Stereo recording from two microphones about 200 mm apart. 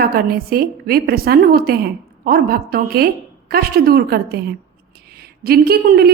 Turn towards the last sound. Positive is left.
turn(degrees=-50)  # may be behind; listen again after turning